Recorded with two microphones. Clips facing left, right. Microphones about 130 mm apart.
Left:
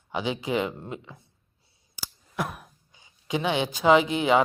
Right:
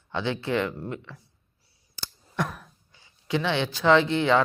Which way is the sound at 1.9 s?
5° left (ahead or behind).